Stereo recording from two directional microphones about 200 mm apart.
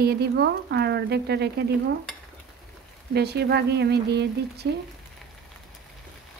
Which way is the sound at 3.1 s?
55° right (ahead or behind).